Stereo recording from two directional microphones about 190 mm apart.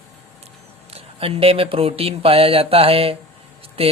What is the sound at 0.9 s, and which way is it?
Speech, 30° right (ahead or behind).